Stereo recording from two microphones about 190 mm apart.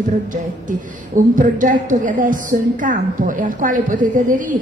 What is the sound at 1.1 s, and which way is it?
A woman's voice, 45° right (ahead or behind).